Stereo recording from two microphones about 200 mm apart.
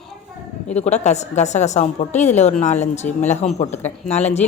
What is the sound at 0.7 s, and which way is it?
A woman's voice, 35° left (ahead or behind).